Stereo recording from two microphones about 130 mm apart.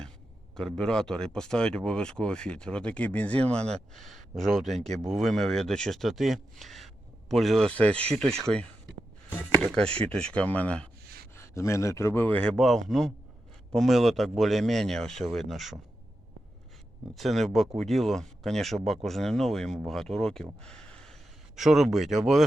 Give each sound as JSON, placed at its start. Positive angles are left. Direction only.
{"t": 0.5, "sound": "speech", "side_deg": 5}
{"t": 11.3, "sound": "speech", "side_deg": 20}
{"t": 17.2, "sound": "speech", "side_deg": 0}